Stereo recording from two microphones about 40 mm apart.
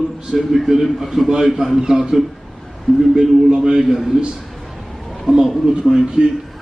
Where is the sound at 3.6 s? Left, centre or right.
Centre.